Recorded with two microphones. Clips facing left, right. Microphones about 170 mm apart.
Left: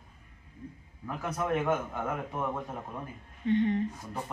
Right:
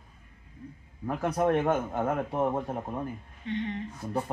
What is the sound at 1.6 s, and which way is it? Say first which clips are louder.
A man's voice: right 3 dB; 40° right (ahead or behind).